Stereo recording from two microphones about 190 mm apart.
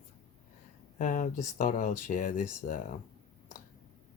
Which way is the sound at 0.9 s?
45° left (ahead or behind).